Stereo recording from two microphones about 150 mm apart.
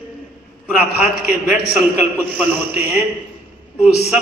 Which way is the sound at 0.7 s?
10° right (ahead or behind).